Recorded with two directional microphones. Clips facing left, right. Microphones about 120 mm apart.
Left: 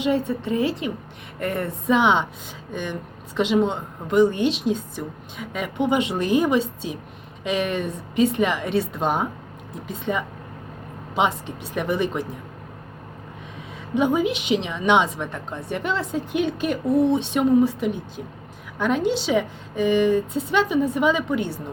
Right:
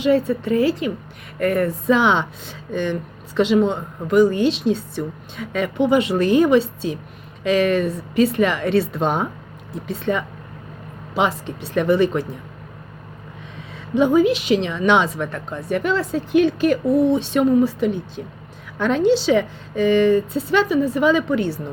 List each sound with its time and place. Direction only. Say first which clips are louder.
0.0 s a woman's voice: right 5 dB; 20° left (ahead or behind)
13.9 s speech: right 5 dB; 15° left (ahead or behind)